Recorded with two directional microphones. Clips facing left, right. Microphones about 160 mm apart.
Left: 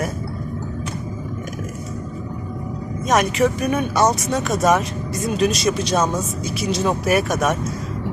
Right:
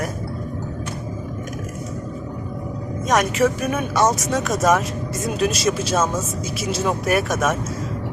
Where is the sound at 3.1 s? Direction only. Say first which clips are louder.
Left 1 dB; centre (ahead or behind).